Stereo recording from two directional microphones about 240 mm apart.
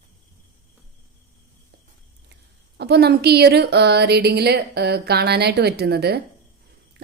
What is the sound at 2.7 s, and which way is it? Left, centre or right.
A woman's voice, right.